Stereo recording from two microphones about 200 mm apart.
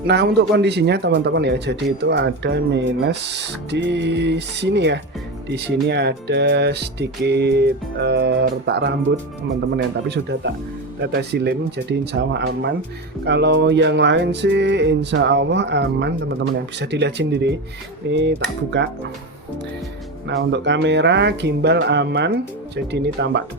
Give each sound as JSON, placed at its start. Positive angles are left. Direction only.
{"t": 0.1, "sound": "speech", "side_deg": -60}
{"t": 20.2, "sound": "speech", "side_deg": -60}